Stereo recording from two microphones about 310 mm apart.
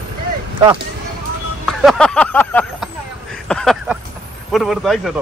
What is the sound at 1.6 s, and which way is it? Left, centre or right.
Speech, centre.